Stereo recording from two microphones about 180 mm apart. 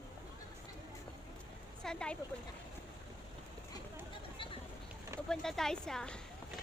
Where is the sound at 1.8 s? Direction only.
5° left (ahead or behind).